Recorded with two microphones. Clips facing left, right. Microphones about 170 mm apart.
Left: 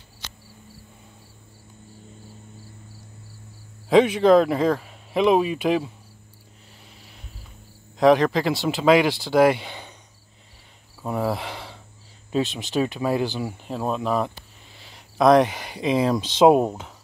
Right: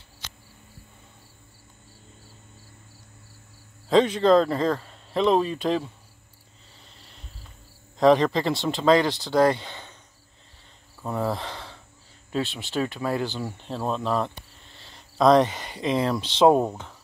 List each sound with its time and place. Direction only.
3.9 s speech: 10° left (ahead or behind)
7.0 s cricket: 10° left (ahead or behind)
8.0 s speech: 5° left (ahead or behind)
11.0 s cricket: 10° left (ahead or behind)
12.3 s speech: 15° left (ahead or behind)